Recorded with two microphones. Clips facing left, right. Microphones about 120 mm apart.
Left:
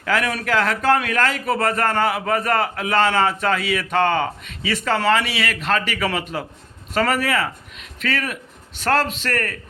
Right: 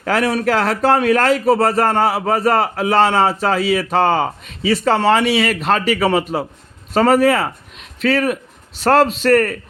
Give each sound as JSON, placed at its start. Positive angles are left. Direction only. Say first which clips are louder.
{"t": 0.0, "sound": "a man's voice", "louder": "right 5 dB", "side_deg": -35}